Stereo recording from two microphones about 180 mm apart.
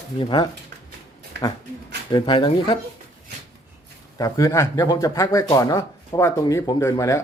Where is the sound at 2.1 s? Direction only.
25° left (ahead or behind).